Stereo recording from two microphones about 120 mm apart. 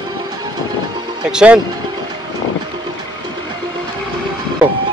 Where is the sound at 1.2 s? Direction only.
10° right (ahead or behind).